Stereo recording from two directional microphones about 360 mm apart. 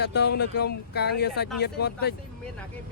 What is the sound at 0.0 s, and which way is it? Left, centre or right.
Speech, left.